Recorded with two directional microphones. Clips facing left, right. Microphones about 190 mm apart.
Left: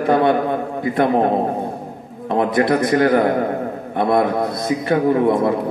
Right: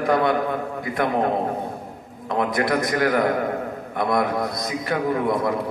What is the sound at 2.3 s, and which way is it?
A man's voice, 30° left (ahead or behind).